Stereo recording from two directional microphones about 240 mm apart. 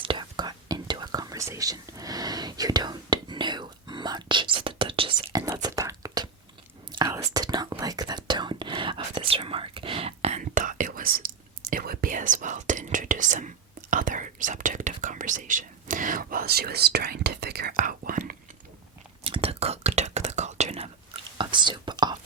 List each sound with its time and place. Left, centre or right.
0.0 s whispering: centre; by 18.3 s right
19.2 s whispering: right